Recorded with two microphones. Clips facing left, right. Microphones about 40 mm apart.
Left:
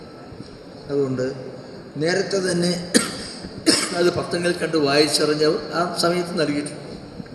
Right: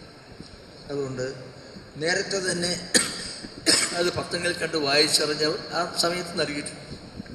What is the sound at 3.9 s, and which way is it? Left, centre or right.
Throat clearing, left.